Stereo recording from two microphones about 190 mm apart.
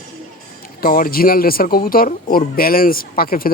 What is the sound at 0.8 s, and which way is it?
Speech, 50° left (ahead or behind).